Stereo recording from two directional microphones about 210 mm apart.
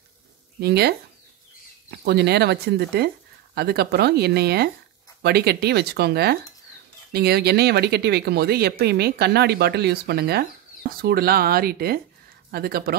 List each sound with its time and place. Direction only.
0.6 s speech: 50° right (ahead or behind)